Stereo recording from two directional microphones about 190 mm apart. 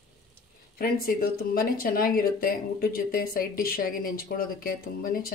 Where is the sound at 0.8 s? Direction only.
50° left (ahead or behind).